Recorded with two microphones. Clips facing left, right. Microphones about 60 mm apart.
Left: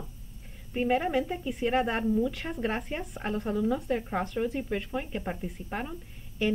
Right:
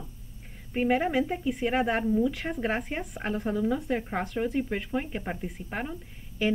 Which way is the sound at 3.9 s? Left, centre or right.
Right.